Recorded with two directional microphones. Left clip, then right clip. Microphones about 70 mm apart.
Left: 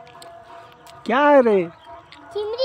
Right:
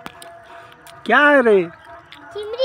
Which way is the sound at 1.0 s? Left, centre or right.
Centre.